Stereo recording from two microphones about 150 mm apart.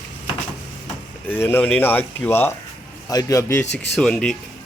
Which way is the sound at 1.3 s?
15° left (ahead or behind).